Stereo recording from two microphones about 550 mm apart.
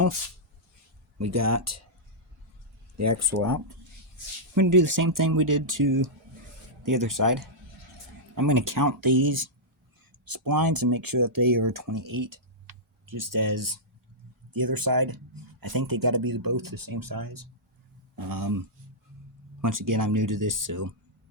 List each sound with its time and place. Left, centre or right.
1.2 s speech: right
3.0 s speech: right
19.6 s speech: right